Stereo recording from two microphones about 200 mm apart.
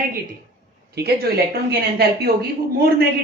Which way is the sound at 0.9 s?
50° right (ahead or behind).